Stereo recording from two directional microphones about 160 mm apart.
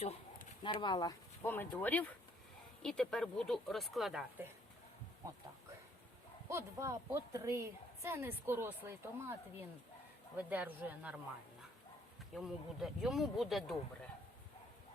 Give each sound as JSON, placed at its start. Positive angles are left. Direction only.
{"t": 0.6, "sound": "speech", "side_deg": 30}
{"t": 1.5, "sound": "speech", "side_deg": 10}
{"t": 6.5, "sound": "a woman's voice", "side_deg": -20}
{"t": 12.3, "sound": "speech", "side_deg": 0}